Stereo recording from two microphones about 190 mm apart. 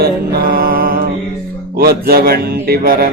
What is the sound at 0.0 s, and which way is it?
Mantra, 50° right (ahead or behind).